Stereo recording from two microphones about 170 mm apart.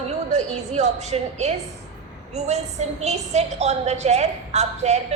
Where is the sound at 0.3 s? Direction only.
40° right (ahead or behind).